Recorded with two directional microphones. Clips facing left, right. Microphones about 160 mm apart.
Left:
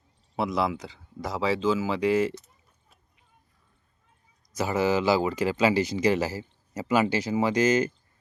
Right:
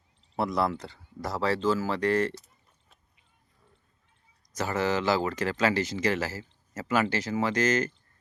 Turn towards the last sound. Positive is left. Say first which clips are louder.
# left 3 dB
turn(degrees=10)  # may be behind; listen again after turning